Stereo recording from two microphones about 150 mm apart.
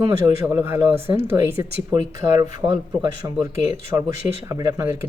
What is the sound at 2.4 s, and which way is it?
Speech, 25° right (ahead or behind).